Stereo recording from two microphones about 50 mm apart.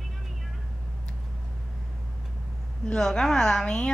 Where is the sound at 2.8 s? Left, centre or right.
Centre.